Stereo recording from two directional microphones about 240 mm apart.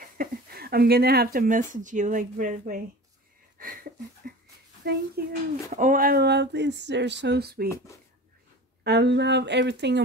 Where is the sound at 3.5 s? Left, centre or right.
Right.